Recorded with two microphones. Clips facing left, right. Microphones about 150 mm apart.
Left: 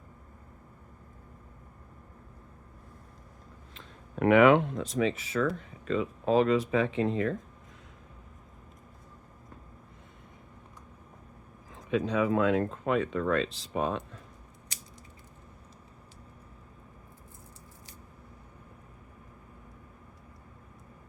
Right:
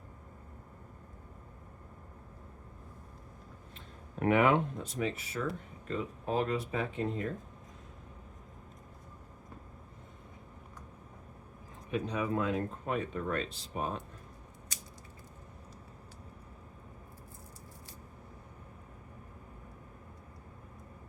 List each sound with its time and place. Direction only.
3.8 s speech: 90° left
11.7 s speech: 90° left